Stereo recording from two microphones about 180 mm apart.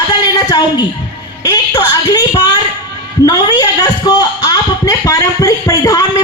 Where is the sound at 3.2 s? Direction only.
20° left (ahead or behind).